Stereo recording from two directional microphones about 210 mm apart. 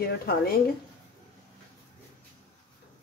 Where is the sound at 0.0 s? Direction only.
50° left (ahead or behind).